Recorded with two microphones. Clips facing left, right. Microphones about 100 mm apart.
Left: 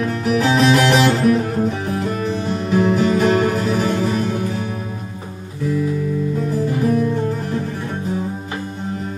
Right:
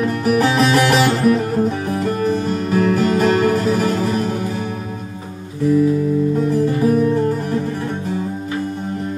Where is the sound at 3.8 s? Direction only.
45° right (ahead or behind).